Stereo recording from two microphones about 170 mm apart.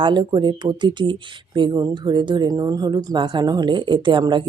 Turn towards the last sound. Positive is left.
turn(degrees=-30)  # may be behind; listen again after turning